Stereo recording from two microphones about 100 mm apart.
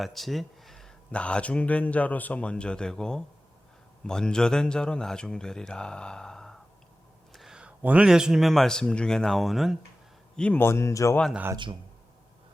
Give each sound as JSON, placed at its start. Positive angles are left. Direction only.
{"t": 0.0, "sound": "speech", "side_deg": 0}
{"t": 7.3, "sound": "a sound", "side_deg": -5}
{"t": 7.8, "sound": "speech", "side_deg": -15}
{"t": 10.3, "sound": "speech", "side_deg": 10}
{"t": 10.6, "sound": "speech", "side_deg": 25}
{"t": 11.5, "sound": "speech", "side_deg": -55}